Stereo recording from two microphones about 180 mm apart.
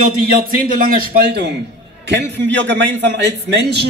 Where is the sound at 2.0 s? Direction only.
75° right (ahead or behind).